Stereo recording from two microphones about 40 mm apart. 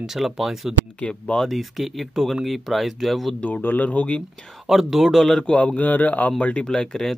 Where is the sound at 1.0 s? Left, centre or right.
Left.